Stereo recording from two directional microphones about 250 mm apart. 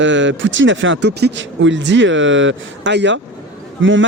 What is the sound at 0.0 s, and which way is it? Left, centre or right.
Speech, right.